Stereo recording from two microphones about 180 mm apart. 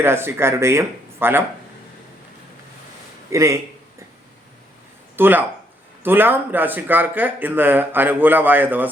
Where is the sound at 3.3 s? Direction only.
15° right (ahead or behind).